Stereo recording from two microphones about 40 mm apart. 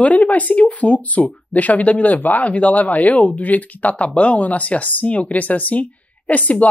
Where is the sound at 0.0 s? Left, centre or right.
Left.